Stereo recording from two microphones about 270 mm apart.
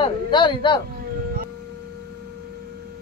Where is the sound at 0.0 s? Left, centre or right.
Centre.